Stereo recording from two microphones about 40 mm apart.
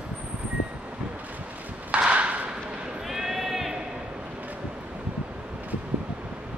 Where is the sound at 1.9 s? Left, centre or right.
Right.